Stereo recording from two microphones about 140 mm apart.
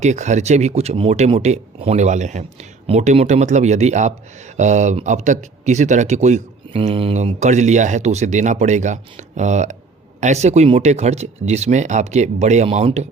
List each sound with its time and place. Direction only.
0.0 s speech: 55° right (ahead or behind)